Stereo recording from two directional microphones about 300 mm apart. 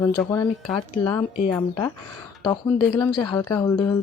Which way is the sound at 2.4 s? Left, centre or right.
Centre.